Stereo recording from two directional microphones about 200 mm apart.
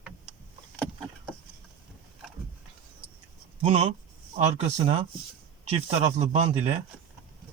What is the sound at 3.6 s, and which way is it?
A man's voice, 30° right (ahead or behind).